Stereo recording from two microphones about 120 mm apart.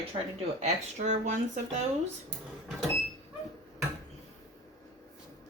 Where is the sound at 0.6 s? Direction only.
80° right.